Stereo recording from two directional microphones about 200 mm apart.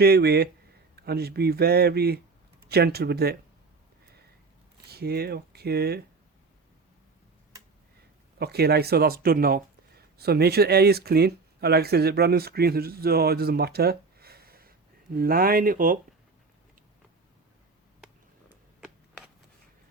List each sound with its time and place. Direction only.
0.0 s speech: 50° right (ahead or behind)
4.9 s speech: 50° right (ahead or behind)
8.4 s speech: 55° right (ahead or behind)